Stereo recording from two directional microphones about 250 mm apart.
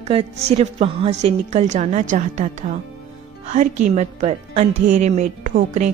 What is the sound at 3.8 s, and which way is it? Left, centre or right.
A woman's voice, right.